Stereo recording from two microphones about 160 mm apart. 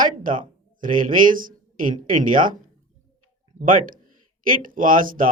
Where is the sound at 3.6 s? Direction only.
60° right (ahead or behind).